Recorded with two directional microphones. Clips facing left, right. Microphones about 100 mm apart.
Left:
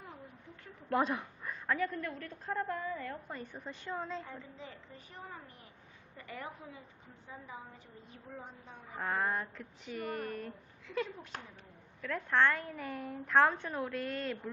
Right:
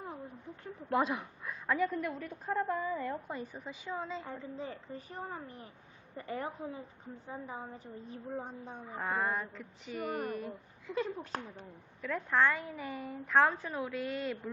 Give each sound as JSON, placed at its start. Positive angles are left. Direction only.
{"t": 0.9, "sound": "a woman's voice", "side_deg": -5}
{"t": 4.5, "sound": "a woman's voice", "side_deg": -40}
{"t": 9.0, "sound": "a woman's voice", "side_deg": -5}
{"t": 11.2, "sound": "a woman's voice", "side_deg": -35}
{"t": 12.1, "sound": "a woman's voice", "side_deg": -5}